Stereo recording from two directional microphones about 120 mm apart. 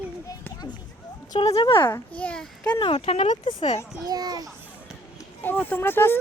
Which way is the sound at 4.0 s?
30° right (ahead or behind).